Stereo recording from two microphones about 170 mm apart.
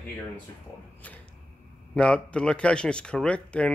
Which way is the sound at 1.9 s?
5° left (ahead or behind).